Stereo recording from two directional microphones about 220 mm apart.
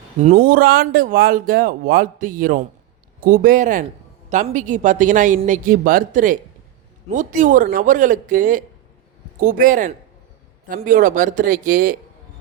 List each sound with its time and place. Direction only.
0.2 s speech: 30° right (ahead or behind)